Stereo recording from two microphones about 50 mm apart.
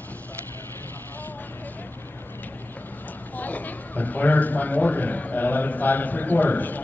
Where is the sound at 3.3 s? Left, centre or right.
Left.